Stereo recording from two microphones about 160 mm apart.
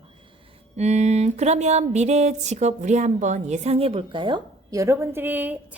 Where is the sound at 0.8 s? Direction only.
45° right (ahead or behind).